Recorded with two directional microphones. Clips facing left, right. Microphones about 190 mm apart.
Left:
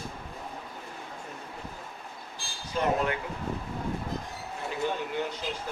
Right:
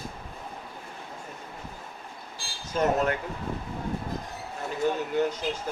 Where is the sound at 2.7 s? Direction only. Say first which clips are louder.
Right 3 dB; 45° right (ahead or behind).